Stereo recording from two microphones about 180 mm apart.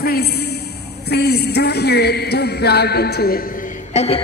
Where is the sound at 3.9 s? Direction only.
35° left (ahead or behind).